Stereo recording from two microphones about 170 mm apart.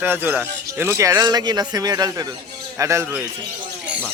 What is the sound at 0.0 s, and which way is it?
A man's voice, 10° right (ahead or behind).